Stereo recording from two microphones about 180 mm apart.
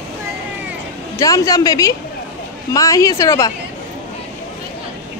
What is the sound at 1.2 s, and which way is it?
A man's voice, 20° left (ahead or behind).